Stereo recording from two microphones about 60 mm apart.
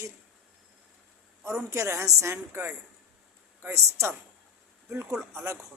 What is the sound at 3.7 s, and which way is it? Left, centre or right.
Speech, right.